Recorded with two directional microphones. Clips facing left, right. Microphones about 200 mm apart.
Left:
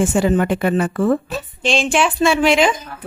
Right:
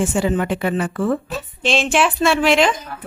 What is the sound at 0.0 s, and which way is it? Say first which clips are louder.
A woman's voice: left 3 dB; 45° left (ahead or behind).